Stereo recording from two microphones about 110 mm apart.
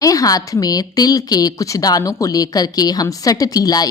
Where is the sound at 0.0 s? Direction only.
30° left (ahead or behind).